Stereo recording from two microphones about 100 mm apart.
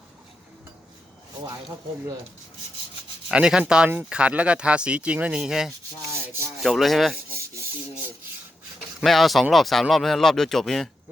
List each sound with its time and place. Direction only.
3.2 s speech: 5° right (ahead or behind)
7.3 s rub: 25° right (ahead or behind)
9.0 s speech: centre (ahead or behind)